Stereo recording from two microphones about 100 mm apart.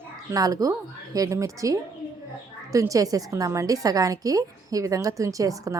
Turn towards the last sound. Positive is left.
turn(degrees=-35)  # may be behind; listen again after turning